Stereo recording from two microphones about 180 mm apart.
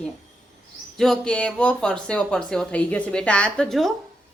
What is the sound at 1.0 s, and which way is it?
Speech, 5° left (ahead or behind).